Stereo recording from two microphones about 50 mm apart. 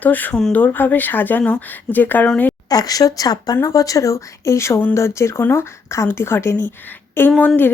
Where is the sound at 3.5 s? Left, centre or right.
Left.